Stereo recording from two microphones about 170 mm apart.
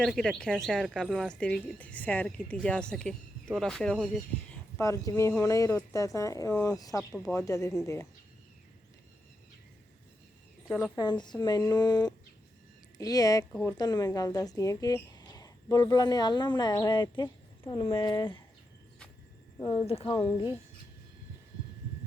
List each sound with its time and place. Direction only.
0.0 s speech: centre (ahead or behind)
4.8 s speech: 15° left (ahead or behind)
10.7 s speech: centre (ahead or behind)
10.9 s speech: 25° left (ahead or behind)
19.5 s speech: 30° left (ahead or behind)